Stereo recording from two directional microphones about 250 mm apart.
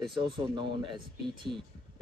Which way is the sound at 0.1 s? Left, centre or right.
Centre.